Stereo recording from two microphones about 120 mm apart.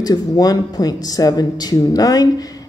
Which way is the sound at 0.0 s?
30° left (ahead or behind).